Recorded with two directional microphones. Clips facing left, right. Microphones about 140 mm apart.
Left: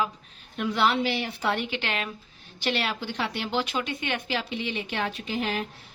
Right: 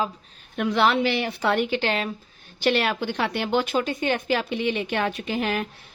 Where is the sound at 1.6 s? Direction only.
35° right (ahead or behind).